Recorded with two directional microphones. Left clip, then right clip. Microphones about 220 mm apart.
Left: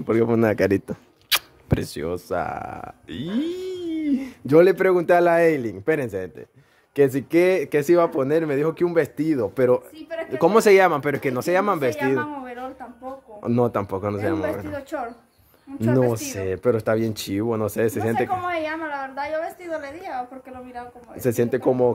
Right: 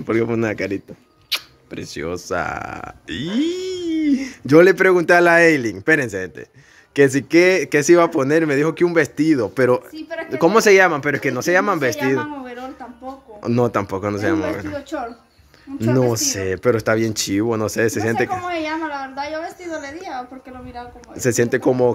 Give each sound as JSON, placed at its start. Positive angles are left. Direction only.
{"t": 0.0, "sound": "speech", "side_deg": 10}
{"t": 0.3, "sound": "speech", "side_deg": 25}
{"t": 1.3, "sound": "camera", "side_deg": 55}
{"t": 2.0, "sound": "speech", "side_deg": 10}